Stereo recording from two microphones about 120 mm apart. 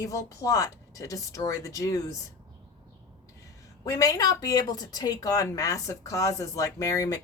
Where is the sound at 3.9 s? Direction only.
30° left (ahead or behind).